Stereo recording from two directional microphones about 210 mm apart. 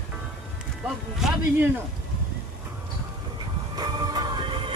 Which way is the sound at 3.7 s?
20° right (ahead or behind).